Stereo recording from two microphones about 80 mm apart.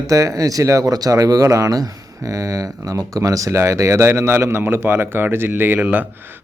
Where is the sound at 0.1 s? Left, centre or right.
Right.